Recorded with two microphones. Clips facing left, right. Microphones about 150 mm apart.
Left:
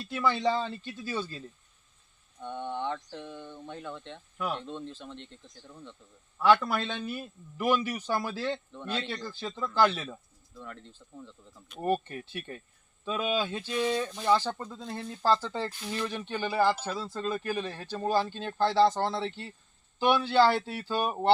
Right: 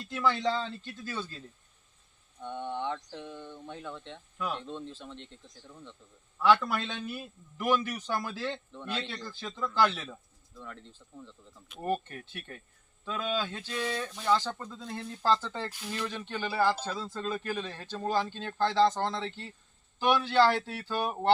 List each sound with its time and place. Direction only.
0.1 s a man's voice: 10° left (ahead or behind)
2.4 s a man's voice: centre (ahead or behind)
11.8 s a man's voice: 15° left (ahead or behind)